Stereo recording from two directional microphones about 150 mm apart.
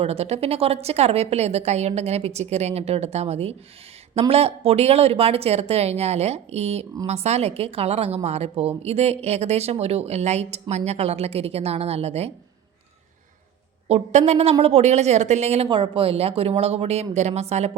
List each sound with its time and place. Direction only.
0.0 s a woman's voice: 45° right (ahead or behind)
13.8 s a woman's voice: 45° right (ahead or behind)